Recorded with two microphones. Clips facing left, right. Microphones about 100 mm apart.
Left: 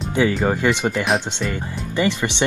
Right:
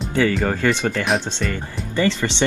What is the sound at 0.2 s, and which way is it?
Speech, 15° left (ahead or behind).